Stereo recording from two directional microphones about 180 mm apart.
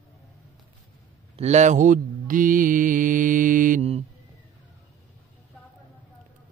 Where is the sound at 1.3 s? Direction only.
40° right (ahead or behind).